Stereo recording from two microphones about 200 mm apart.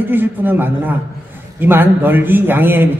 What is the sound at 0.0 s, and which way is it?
A man's voice, 10° right (ahead or behind).